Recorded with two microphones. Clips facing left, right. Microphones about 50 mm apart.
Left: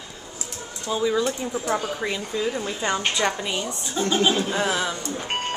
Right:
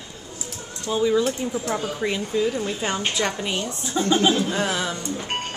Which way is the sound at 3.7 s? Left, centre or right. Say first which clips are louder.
Right 4 dB; centre.